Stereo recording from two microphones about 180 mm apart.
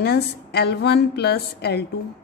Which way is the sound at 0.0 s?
65° left (ahead or behind).